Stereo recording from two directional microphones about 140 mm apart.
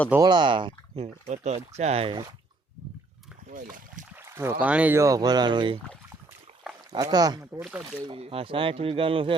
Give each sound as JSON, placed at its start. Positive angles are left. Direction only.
{"t": 0.2, "sound": "speech", "side_deg": -30}
{"t": 1.0, "sound": "speech", "side_deg": -50}
{"t": 4.1, "sound": "rowboat", "side_deg": -15}
{"t": 4.6, "sound": "speech", "side_deg": -10}
{"t": 4.9, "sound": "speech", "side_deg": -25}
{"t": 6.9, "sound": "speech", "side_deg": -25}
{"t": 7.7, "sound": "speech", "side_deg": -10}
{"t": 8.0, "sound": "speech", "side_deg": -40}